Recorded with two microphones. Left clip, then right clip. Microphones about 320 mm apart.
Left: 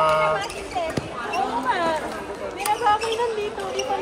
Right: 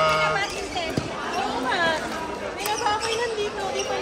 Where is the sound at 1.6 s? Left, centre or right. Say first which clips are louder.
Left 1 dB; left.